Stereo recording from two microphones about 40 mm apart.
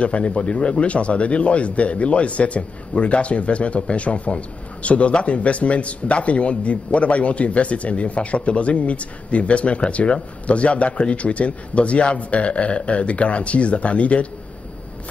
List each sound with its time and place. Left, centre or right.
0.0 s speech: left